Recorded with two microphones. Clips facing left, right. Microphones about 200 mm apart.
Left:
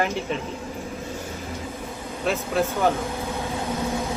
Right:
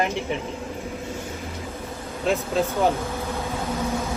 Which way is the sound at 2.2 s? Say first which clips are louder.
Right 1 dB; 15° right (ahead or behind).